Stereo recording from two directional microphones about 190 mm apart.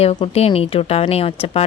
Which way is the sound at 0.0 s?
35° left (ahead or behind).